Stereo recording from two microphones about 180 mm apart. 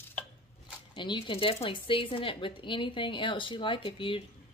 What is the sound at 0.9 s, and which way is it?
Speech, 25° left (ahead or behind).